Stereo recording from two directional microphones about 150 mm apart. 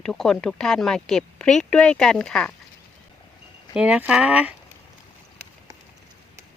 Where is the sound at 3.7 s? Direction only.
5° right (ahead or behind).